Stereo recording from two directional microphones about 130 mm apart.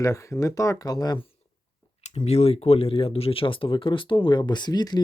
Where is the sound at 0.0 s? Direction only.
25° left (ahead or behind).